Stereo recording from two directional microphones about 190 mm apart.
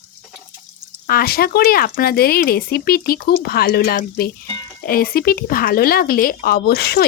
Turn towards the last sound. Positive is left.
turn(degrees=60)  # may be behind; listen again after turning